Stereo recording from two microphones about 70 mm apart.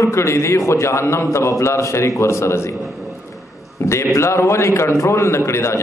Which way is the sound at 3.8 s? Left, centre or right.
Left.